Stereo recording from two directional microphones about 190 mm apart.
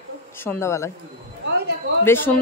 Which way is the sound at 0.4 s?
15° left (ahead or behind).